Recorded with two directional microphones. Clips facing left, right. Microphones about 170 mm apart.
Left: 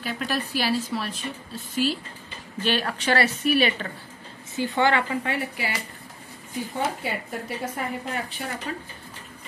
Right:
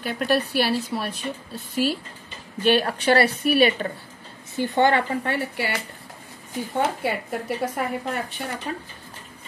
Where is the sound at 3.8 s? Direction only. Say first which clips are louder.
Right 6 dB; 30° right (ahead or behind).